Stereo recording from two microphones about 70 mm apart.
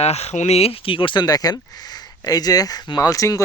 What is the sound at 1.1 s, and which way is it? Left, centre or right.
Speech, left.